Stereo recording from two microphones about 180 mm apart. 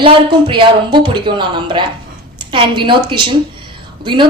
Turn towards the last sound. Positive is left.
turn(degrees=-25)  # may be behind; listen again after turning